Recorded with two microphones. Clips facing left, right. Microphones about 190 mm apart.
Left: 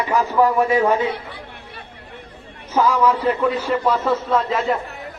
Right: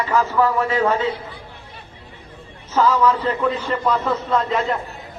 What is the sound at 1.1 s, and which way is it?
Chatter, 65° left (ahead or behind).